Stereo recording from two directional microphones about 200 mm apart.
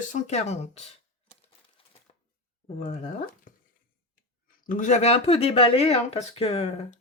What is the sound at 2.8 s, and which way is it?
Speech, 35° left (ahead or behind).